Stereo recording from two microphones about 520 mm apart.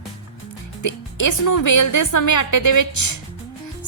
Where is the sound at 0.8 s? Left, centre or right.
Left.